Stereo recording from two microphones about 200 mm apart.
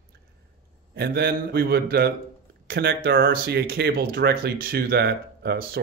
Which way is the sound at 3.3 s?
50° right (ahead or behind).